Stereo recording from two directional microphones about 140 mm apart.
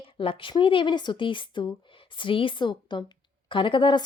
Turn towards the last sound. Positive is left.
turn(degrees=35)  # may be behind; listen again after turning